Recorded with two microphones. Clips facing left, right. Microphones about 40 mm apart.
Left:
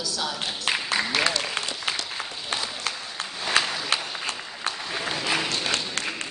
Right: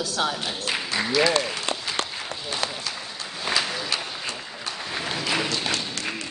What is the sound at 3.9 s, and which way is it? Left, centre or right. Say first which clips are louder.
Applause: left 1 dB; left.